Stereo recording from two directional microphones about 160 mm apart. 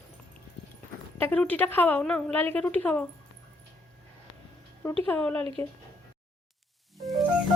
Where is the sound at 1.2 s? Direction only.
10° left (ahead or behind).